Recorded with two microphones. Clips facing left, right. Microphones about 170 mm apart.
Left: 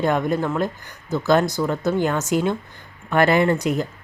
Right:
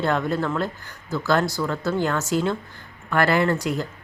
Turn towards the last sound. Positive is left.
turn(degrees=20)  # may be behind; listen again after turning